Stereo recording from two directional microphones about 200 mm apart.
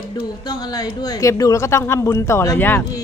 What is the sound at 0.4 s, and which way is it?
A woman's voice, 20° left (ahead or behind).